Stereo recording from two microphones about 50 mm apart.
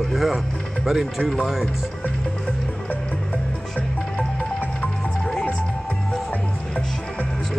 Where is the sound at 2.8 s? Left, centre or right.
Left.